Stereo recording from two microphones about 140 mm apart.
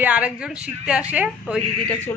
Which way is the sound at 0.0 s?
10° right (ahead or behind).